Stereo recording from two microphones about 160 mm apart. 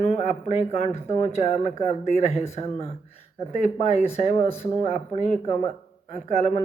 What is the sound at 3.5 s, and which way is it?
Speech, 45° left (ahead or behind).